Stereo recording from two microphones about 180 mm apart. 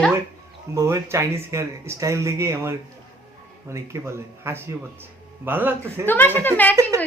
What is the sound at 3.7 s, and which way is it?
Speech, 15° right (ahead or behind).